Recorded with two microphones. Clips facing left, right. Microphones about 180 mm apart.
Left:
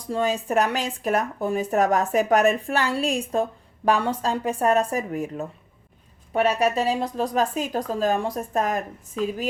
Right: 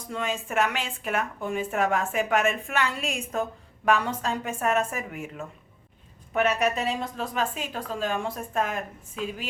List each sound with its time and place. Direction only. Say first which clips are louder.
0.1 s speech: left 7 dB; 35° left (ahead or behind)